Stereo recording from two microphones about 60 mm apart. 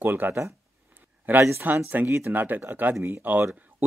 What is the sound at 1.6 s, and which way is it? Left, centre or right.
Speech, right.